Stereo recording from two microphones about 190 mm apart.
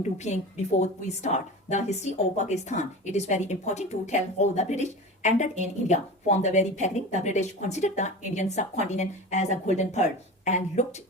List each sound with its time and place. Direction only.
0.0 s a woman's voice: 35° left (ahead or behind)